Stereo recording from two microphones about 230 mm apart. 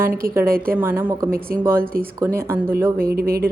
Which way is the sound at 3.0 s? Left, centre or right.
Right.